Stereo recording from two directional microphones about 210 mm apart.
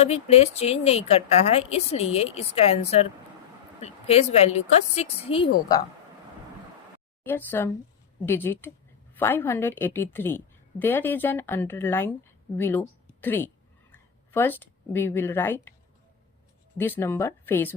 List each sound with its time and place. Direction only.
0.0 s a woman's voice: 30° left (ahead or behind)
7.3 s a woman's voice: 10° left (ahead or behind)
16.7 s a woman's voice: 10° left (ahead or behind)